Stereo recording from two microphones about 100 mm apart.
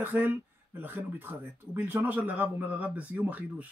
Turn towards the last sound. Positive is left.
turn(degrees=-15)  # may be behind; listen again after turning